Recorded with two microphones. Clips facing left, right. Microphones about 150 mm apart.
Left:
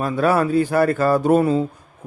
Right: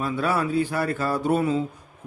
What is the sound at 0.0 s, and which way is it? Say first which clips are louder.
Speech: left 6 dB; 45° left (ahead or behind).